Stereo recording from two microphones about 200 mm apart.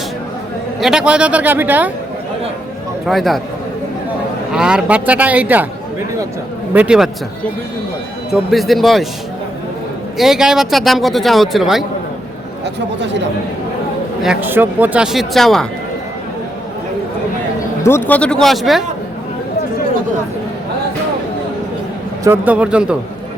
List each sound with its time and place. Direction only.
0.8 s speech: 5° right (ahead or behind)
3.1 s a man's voice: centre (ahead or behind)
4.5 s speech: 5° right (ahead or behind)
6.7 s a man's voice: 5° right (ahead or behind)
8.3 s a man's voice: centre (ahead or behind)
10.2 s a man's voice: centre (ahead or behind)
12.6 s speech: 60° right (ahead or behind)
14.2 s a man's voice: 5° right (ahead or behind)
17.8 s a man's voice: 10° left (ahead or behind)
22.2 s speech: 10° right (ahead or behind)